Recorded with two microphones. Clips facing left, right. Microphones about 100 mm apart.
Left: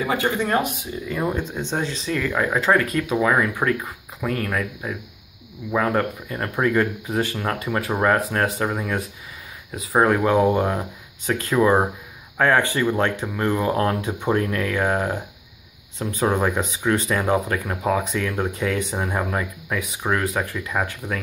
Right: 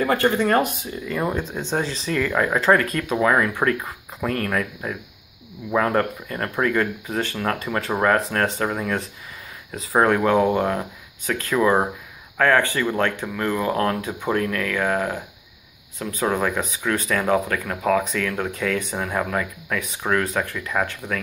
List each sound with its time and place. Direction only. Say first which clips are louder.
0.0 s speech: right 3 dB; 5° left (ahead or behind)
8.5 s speech: even; 10° left (ahead or behind)